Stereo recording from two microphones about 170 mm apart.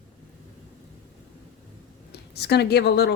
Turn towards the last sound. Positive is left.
turn(degrees=75)  # may be behind; listen again after turning